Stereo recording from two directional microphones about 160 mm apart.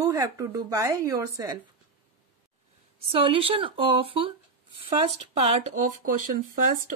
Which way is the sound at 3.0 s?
35° right (ahead or behind).